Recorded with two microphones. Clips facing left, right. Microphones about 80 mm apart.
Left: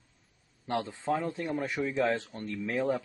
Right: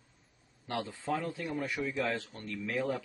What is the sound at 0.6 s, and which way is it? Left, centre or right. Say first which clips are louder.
Speech: left 4 dB; left.